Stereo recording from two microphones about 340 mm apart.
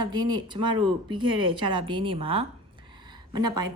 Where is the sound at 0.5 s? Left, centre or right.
Right.